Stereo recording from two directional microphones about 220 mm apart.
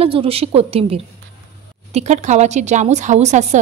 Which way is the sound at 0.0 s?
25° right (ahead or behind).